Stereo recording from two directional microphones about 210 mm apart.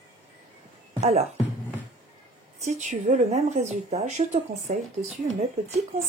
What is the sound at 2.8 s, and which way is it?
Speech, 35° right (ahead or behind).